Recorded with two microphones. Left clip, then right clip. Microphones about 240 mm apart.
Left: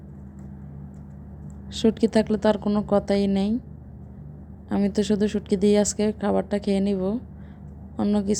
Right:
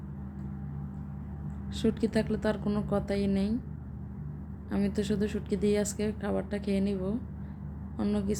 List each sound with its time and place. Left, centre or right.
1.7 s a woman's voice: left
4.7 s a woman's voice: left